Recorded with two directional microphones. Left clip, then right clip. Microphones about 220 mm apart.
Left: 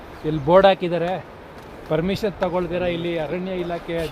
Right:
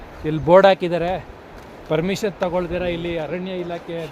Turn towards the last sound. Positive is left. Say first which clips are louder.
# left 2 dB
turn(degrees=20)  # may be behind; listen again after turning